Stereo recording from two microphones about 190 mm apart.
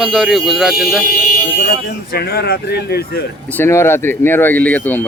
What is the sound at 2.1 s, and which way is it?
Speech, 55° left (ahead or behind).